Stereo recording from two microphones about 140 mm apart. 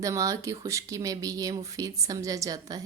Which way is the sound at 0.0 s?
25° right (ahead or behind).